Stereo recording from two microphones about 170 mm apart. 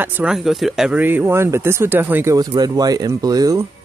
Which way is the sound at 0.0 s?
10° right (ahead or behind).